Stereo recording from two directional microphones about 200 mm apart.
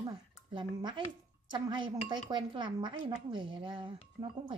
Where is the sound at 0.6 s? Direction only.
25° right (ahead or behind).